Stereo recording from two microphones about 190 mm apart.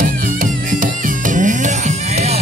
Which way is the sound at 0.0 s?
45° right (ahead or behind).